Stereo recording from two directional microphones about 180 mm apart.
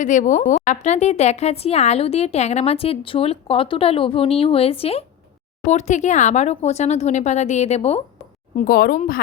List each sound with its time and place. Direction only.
0.0 s a woman's voice: 45° left (ahead or behind)
8.5 s speech: 55° left (ahead or behind)